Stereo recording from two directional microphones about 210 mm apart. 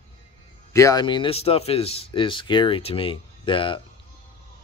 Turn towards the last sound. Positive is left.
turn(degrees=25)  # may be behind; listen again after turning